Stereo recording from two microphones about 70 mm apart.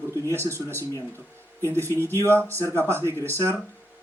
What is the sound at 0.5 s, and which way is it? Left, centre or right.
Speech, right.